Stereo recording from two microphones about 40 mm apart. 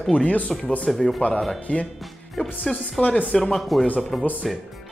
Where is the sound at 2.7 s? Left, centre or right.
Centre.